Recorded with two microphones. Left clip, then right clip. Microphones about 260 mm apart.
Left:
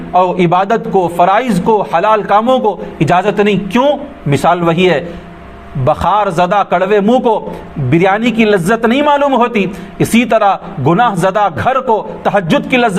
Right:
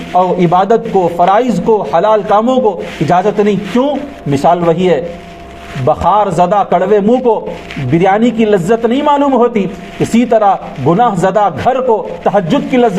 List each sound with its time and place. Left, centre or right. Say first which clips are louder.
0.2 s a man's voice: right 1 dB; left